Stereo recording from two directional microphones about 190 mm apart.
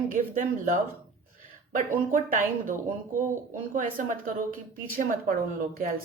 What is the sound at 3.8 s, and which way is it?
Speech, 45° right (ahead or behind).